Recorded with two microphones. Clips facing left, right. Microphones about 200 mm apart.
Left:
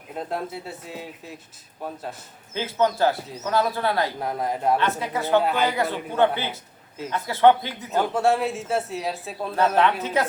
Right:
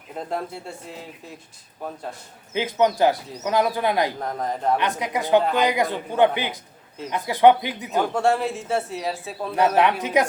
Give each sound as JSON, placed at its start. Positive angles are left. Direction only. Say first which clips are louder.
{"t": 0.1, "sound": "speech", "louder": "even", "side_deg": 0}
{"t": 2.5, "sound": "a man's voice", "louder": "right 2 dB", "side_deg": -15}
{"t": 4.2, "sound": "speech", "louder": "left 1 dB", "side_deg": 10}
{"t": 4.8, "sound": "a man's voice", "louder": "even", "side_deg": -15}
{"t": 8.1, "sound": "speech", "louder": "left 1 dB", "side_deg": 0}
{"t": 9.7, "sound": "a man's voice", "louder": "right 2 dB", "side_deg": -15}